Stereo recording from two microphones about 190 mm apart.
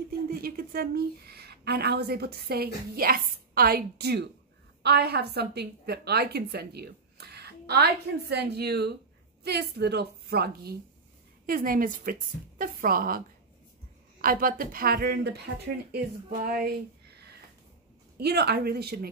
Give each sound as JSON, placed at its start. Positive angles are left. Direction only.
{"t": 0.3, "sound": "a woman's voice", "side_deg": -50}
{"t": 14.2, "sound": "a woman's voice", "side_deg": -50}
{"t": 16.4, "sound": "a woman's voice", "side_deg": -50}
{"t": 18.1, "sound": "a woman's voice", "side_deg": -60}